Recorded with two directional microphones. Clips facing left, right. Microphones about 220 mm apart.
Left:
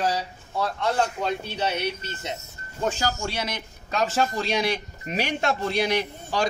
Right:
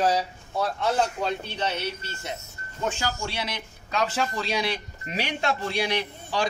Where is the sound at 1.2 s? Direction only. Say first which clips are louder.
Left 1 dB; 10° left (ahead or behind).